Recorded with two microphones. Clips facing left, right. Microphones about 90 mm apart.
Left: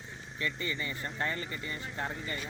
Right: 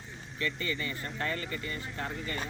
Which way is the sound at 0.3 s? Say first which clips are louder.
Right 1 dB; 25° left (ahead or behind).